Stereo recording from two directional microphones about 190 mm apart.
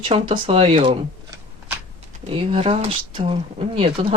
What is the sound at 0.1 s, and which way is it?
Speech, 30° right (ahead or behind).